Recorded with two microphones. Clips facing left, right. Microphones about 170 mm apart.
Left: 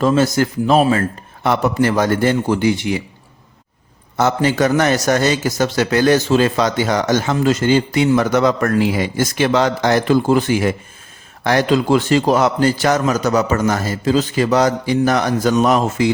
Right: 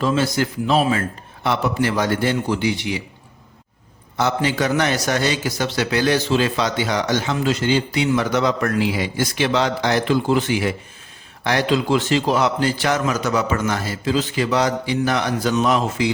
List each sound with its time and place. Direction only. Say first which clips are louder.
0.0 s a man's voice: left 5 dB; 45° left (ahead or behind)
4.2 s a man's voice: left 5 dB; 45° left (ahead or behind)